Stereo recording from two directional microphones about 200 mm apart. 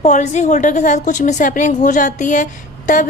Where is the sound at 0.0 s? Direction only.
35° left (ahead or behind).